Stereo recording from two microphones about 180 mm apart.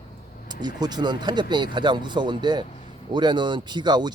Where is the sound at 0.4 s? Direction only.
25° right (ahead or behind).